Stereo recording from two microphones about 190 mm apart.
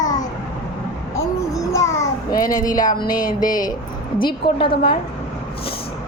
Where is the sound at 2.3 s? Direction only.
20° left (ahead or behind).